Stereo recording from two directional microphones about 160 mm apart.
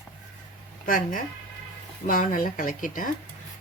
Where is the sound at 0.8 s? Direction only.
60° left (ahead or behind).